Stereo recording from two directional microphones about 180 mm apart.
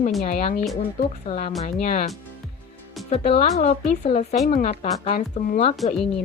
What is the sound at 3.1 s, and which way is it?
A woman's voice, 35° left (ahead or behind).